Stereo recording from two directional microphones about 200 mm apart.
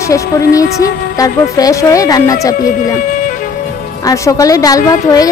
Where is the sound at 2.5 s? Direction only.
40° left (ahead or behind).